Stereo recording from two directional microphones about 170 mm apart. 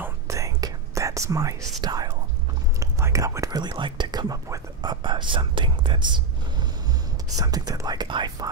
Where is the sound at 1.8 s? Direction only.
25° right (ahead or behind).